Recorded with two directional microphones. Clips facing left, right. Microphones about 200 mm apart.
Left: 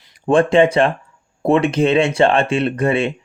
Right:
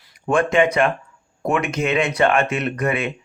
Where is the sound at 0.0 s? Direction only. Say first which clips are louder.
Left 5 dB; 30° left (ahead or behind).